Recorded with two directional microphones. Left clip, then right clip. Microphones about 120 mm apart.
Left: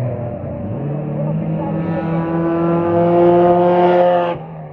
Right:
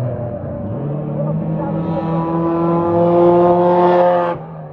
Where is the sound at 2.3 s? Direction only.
40° right (ahead or behind).